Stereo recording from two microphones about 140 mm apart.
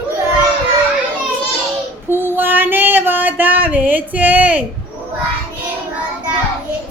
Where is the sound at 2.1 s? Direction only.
15° right (ahead or behind).